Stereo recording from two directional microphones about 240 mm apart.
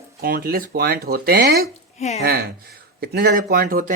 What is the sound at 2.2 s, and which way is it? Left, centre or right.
Speech, right.